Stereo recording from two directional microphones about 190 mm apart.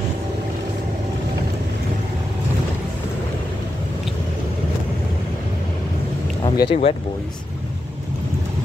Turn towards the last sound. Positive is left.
turn(degrees=30)  # may be behind; listen again after turning